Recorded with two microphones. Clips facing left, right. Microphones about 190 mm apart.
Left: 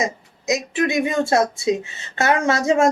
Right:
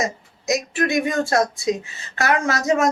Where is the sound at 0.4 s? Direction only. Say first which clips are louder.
Left 1 dB; 20° left (ahead or behind).